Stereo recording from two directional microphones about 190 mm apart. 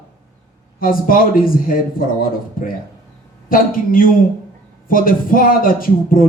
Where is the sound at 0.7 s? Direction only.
45° left (ahead or behind).